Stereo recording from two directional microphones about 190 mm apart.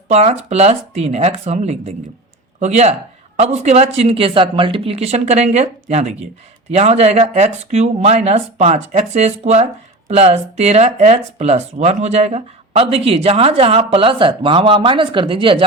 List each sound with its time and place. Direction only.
0.1 s speech: 35° right (ahead or behind)